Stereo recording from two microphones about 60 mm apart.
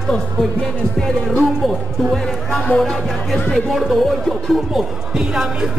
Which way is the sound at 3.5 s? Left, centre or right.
Centre.